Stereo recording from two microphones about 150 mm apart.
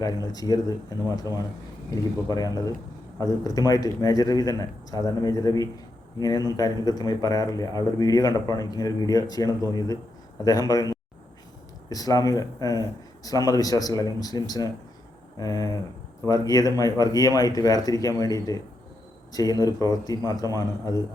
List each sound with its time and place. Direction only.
0.3 s a man's voice: 25° left (ahead or behind)